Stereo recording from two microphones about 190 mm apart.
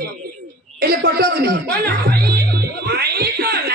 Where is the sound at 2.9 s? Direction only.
55° right (ahead or behind).